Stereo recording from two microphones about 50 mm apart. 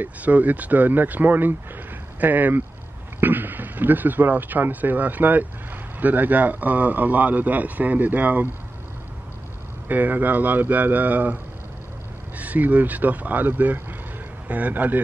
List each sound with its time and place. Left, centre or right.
0.0 s speech: right
9.8 s speech: right
12.4 s speech: right